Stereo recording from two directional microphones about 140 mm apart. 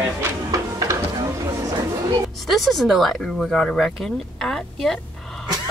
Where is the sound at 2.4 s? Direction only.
Centre (ahead or behind).